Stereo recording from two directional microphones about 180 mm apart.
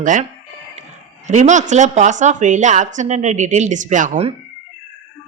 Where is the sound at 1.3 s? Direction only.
40° right (ahead or behind).